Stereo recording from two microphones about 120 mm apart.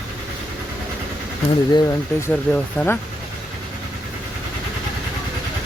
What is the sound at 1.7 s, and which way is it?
Speech, 30° left (ahead or behind).